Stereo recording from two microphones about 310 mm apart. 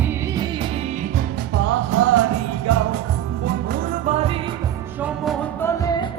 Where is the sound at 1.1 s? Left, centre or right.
Right.